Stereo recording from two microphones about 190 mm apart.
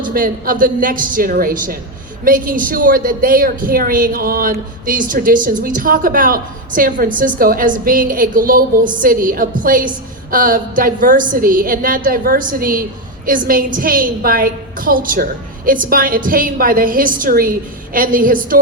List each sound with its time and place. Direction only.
0.1 s a woman's voice: 45° right (ahead or behind)